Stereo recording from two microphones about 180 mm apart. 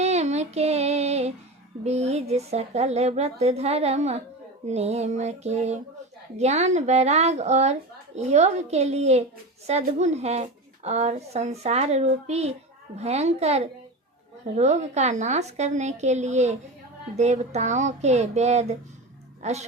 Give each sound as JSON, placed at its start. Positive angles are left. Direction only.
{"t": 0.0, "sound": "female singing", "side_deg": -40}
{"t": 1.8, "sound": "a woman's voice", "side_deg": -35}